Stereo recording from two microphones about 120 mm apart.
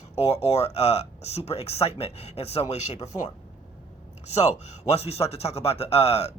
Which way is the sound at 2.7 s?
70° left (ahead or behind).